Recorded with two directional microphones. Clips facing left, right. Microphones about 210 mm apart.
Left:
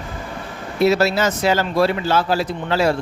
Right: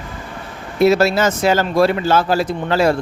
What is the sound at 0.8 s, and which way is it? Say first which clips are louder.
Speech: right 3 dB; 50° right (ahead or behind).